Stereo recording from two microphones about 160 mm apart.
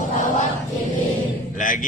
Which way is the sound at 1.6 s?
55° left (ahead or behind).